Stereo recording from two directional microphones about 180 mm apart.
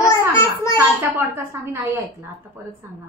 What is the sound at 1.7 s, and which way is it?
Speech, 15° right (ahead or behind).